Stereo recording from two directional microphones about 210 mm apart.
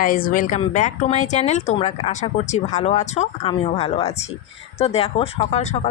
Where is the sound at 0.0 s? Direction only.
40° left (ahead or behind).